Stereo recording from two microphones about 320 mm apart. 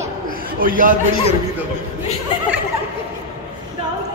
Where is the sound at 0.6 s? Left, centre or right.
Right.